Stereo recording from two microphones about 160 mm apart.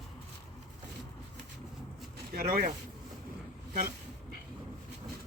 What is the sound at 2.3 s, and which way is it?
Speech, 65° right (ahead or behind).